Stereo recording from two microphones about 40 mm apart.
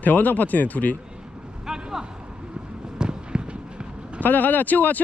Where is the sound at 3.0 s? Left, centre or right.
Right.